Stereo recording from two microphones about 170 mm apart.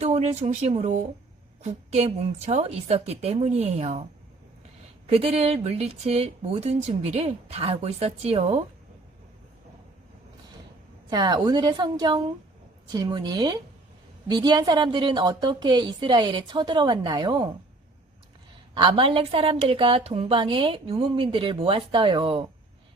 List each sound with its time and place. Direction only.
0.0 s a woman's voice: 45° right (ahead or behind)
5.0 s a woman's voice: 35° right (ahead or behind)
11.1 s a woman's voice: 25° right (ahead or behind)
18.7 s a woman's voice: 30° right (ahead or behind)